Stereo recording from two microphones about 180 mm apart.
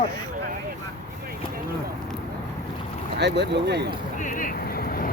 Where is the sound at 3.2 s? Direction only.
70° right (ahead or behind).